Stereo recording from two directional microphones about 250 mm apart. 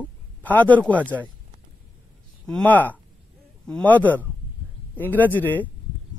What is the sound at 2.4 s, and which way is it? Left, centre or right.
Speech, centre.